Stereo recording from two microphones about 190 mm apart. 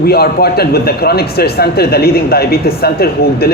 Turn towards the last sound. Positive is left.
turn(degrees=55)  # may be behind; listen again after turning